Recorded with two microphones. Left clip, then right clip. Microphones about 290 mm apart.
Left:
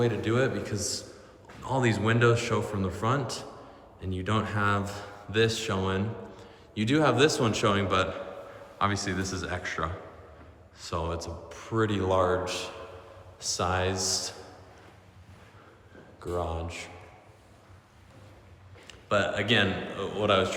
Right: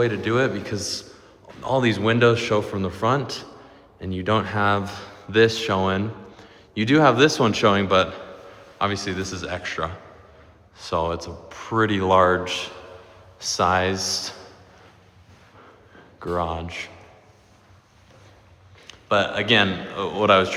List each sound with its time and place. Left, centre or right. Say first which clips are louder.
0.0 s speech: right 6 dB; right
13.6 s speech: right 8 dB; right
16.1 s speech: right 7 dB; right
18.9 s a man's voice: right 6 dB; centre